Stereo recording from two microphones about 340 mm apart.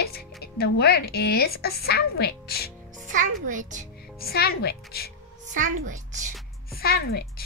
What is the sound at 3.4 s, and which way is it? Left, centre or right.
Speech, right.